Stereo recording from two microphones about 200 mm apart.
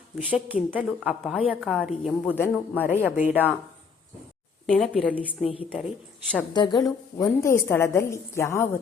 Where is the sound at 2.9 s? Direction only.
10° right (ahead or behind).